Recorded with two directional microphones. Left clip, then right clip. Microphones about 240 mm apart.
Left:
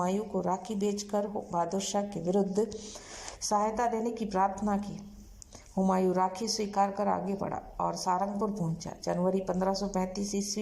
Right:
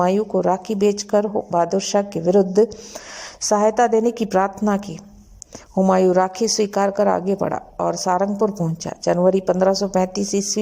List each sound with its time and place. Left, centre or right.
0.0 s speech: right